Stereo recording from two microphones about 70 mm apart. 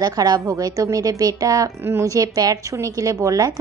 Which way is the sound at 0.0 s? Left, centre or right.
Right.